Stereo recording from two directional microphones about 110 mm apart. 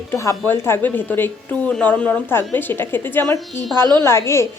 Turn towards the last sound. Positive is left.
turn(degrees=25)  # may be behind; listen again after turning